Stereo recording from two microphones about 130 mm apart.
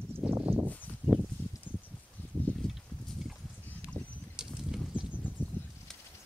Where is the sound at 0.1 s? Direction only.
15° right (ahead or behind).